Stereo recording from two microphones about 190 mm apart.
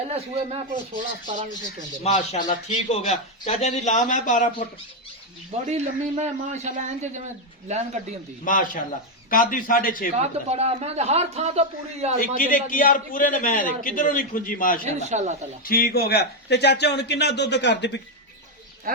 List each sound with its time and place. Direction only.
0.1 s speech: 35° right (ahead or behind)
2.0 s a man's voice: 35° left (ahead or behind)
5.6 s speech: 35° right (ahead or behind)
8.4 s a man's voice: 45° left (ahead or behind)
10.2 s speech: 35° right (ahead or behind)
12.4 s a man's voice: 45° left (ahead or behind)
14.8 s speech: 35° right (ahead or behind)
15.6 s a man's voice: 50° left (ahead or behind); by 18.0 s 65° left (ahead or behind)